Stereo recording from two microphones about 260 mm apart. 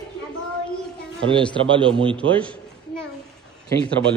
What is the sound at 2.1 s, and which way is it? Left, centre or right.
Speech, centre.